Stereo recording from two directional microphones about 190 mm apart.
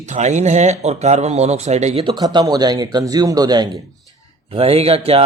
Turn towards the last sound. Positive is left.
turn(degrees=-30)  # may be behind; listen again after turning